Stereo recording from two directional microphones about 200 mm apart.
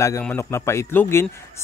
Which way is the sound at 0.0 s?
10° left (ahead or behind).